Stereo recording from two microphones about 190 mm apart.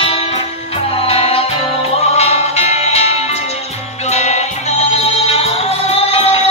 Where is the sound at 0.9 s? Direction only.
30° left (ahead or behind).